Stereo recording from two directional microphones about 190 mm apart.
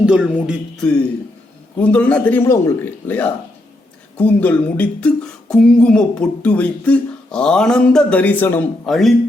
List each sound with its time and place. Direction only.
0.0 s speech: 5° right (ahead or behind)
1.8 s a man's voice: 5° left (ahead or behind)